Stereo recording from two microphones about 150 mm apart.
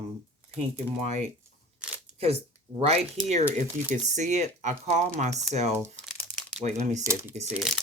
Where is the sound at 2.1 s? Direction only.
40° right (ahead or behind).